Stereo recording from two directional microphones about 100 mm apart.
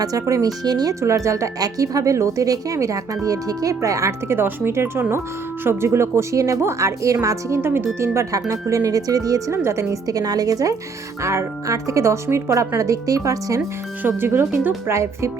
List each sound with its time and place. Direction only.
0.0 s speech: 35° right (ahead or behind)
1.0 s speech: 30° right (ahead or behind)
14.0 s speech: 20° right (ahead or behind)